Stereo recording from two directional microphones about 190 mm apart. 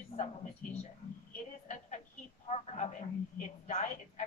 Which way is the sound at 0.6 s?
40° left (ahead or behind).